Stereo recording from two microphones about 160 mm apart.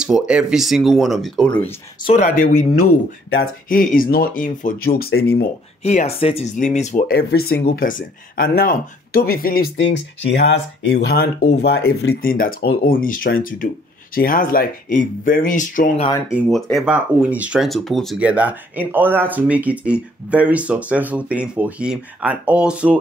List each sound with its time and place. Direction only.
0.0 s speech: 5° right (ahead or behind)
2.1 s speech: 50° left (ahead or behind); by 5.5 s 80° left
5.9 s speech: 45° left (ahead or behind)
6.5 s speech: 50° left (ahead or behind)
7.1 s speech: 80° left; by 9.7 s 65° left (ahead or behind)
10.3 s speech: 90° left; by 15.9 s 55° left (ahead or behind)
16.3 s speech: 5° right (ahead or behind)
18.3 s speech: 10° right (ahead or behind)